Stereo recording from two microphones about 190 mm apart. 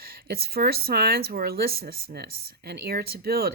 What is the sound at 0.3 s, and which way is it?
Speech, 55° right (ahead or behind).